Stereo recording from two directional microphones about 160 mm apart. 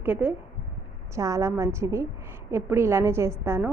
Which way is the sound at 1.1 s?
20° right (ahead or behind).